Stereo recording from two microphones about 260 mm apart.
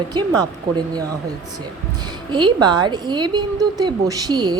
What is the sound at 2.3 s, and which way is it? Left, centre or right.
A woman's voice, centre.